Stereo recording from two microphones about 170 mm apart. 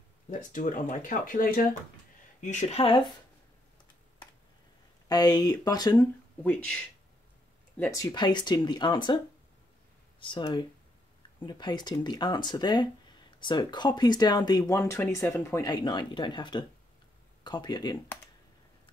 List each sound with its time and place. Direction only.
0.3 s speech: 50° left (ahead or behind)
5.0 s speech: 20° left (ahead or behind)
6.4 s speech: 5° left (ahead or behind)
8.0 s speech: 25° left (ahead or behind)
10.2 s speech: 25° left (ahead or behind)